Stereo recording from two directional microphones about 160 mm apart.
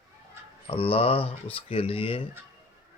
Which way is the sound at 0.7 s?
35° left (ahead or behind).